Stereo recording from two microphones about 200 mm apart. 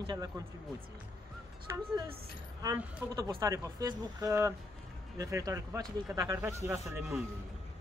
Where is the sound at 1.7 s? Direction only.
15° right (ahead or behind).